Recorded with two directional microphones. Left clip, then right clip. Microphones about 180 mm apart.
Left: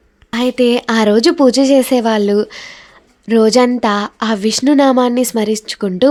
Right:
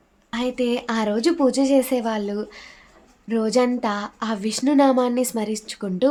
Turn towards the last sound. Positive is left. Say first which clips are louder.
# left 8 dB
turn(degrees=35)  # may be behind; listen again after turning